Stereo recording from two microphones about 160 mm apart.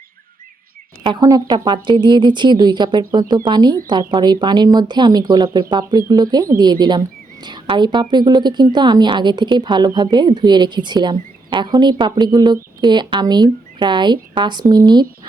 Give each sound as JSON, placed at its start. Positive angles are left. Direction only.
{"t": 1.0, "sound": "a woman's voice", "side_deg": -25}